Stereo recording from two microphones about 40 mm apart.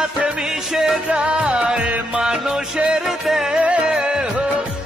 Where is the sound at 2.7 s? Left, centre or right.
Right.